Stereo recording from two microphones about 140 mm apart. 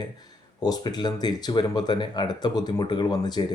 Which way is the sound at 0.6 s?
30° left (ahead or behind).